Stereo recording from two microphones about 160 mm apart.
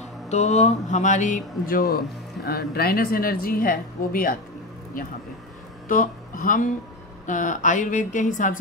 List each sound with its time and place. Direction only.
0.3 s a woman's voice: 45° left (ahead or behind)